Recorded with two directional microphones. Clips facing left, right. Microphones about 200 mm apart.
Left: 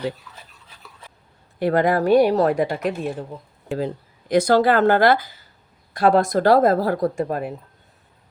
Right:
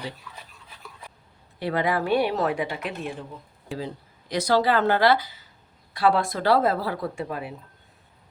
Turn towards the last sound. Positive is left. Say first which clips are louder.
# left 7 dB
turn(degrees=45)  # may be behind; listen again after turning